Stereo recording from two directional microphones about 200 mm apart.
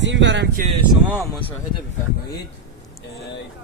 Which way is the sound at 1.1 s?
10° left (ahead or behind).